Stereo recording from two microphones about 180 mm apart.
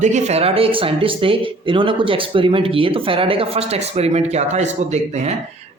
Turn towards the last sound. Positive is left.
turn(degrees=-40)  # may be behind; listen again after turning